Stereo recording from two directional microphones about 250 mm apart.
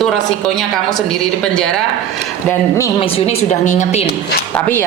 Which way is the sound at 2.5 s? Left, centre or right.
Centre.